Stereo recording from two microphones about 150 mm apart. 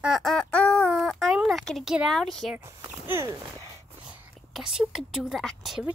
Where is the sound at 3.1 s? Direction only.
15° right (ahead or behind).